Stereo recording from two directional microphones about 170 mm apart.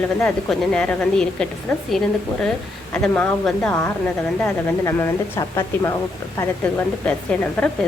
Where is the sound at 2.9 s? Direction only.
5° left (ahead or behind).